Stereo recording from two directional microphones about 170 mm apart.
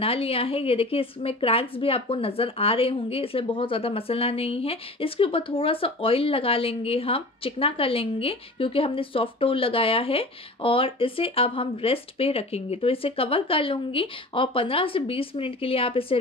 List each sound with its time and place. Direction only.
0.0 s a woman's voice: 35° left (ahead or behind)